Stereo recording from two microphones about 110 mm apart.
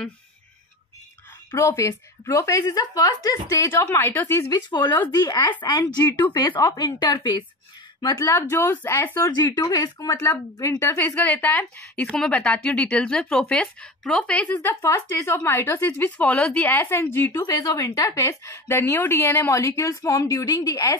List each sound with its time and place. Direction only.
1.5 s speech: 25° left (ahead or behind)
4.5 s speech: 40° left (ahead or behind)
8.2 s speech: 25° left (ahead or behind)
9.4 s speech: 35° left (ahead or behind)